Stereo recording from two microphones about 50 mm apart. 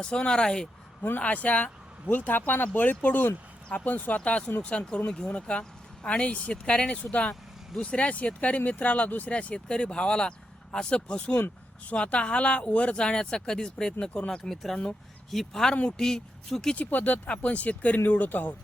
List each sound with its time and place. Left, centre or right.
0.0 s speech: centre
1.2 s speech: left
4.2 s speech: left
11.3 s speech: left
11.9 s speech: left
14.5 s speech: centre
15.7 s speech: left
16.0 s speech: centre
16.7 s speech: left